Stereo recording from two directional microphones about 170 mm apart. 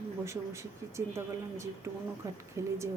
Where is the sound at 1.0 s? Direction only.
15° right (ahead or behind).